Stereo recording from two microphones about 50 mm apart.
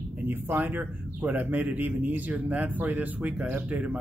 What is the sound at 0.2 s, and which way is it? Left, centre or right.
Speech, right.